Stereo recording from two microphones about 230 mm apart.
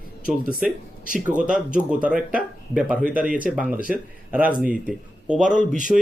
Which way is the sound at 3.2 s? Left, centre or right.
Right.